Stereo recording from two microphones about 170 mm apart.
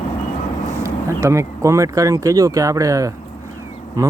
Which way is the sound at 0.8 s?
15° right (ahead or behind).